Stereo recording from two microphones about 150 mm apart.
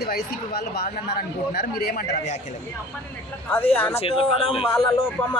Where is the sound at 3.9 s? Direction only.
40° left (ahead or behind).